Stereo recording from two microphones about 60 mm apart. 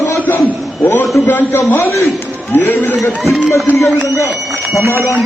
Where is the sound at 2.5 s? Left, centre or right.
Left.